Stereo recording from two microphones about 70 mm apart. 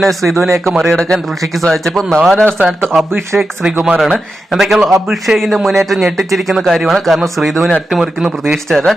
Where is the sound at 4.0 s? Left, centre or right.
Centre.